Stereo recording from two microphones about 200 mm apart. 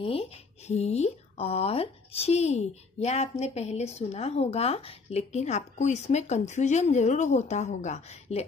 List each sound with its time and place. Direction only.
0.0 s speech: 30° left (ahead or behind)